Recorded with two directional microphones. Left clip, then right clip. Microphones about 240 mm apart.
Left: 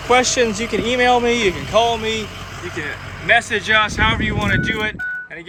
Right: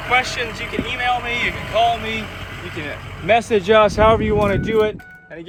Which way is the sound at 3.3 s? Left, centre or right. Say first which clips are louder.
Right 1 dB; centre.